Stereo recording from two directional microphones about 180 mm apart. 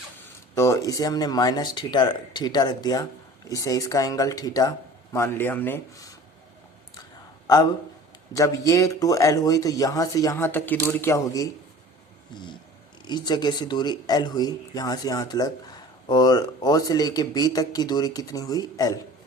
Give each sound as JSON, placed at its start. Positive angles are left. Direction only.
{"t": 0.5, "sound": "speech", "side_deg": 15}
{"t": 7.4, "sound": "speech", "side_deg": 20}
{"t": 13.1, "sound": "speech", "side_deg": 25}